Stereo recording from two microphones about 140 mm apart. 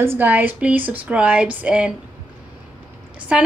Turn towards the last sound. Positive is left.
turn(degrees=-10)  # may be behind; listen again after turning